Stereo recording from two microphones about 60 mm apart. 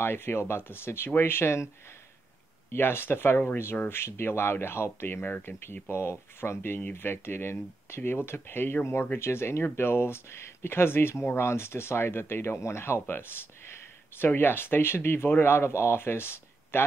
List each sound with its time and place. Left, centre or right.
0.0 s speech: left
2.7 s speech: left